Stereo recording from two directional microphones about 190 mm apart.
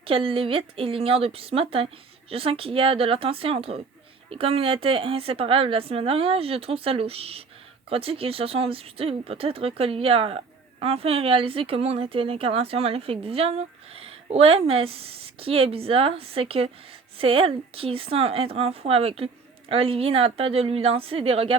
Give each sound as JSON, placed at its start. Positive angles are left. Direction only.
{"t": 0.0, "sound": "a woman's voice", "side_deg": -30}
{"t": 13.9, "sound": "a sound", "side_deg": -30}
{"t": 14.7, "sound": "speech", "side_deg": -30}